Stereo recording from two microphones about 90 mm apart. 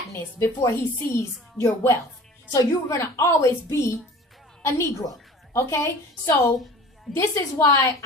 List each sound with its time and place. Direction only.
0.1 s a woman's voice: 30° left (ahead or behind)